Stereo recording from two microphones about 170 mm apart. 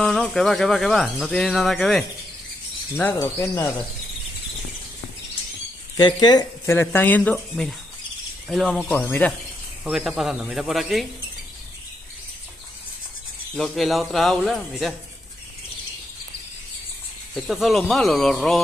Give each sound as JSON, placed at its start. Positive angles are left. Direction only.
{"t": 0.0, "sound": "speech", "side_deg": 0}
{"t": 3.0, "sound": "speech", "side_deg": 15}
{"t": 5.9, "sound": "speech", "side_deg": 25}
{"t": 8.9, "sound": "speech", "side_deg": 10}
{"t": 9.8, "sound": "speech", "side_deg": -5}
{"t": 13.6, "sound": "speech", "side_deg": 0}
{"t": 17.3, "sound": "speech", "side_deg": 0}